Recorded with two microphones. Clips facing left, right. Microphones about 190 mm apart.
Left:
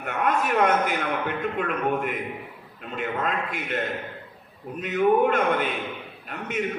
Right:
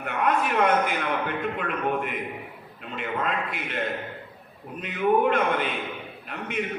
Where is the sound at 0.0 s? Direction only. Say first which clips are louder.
Even; 50° left (ahead or behind).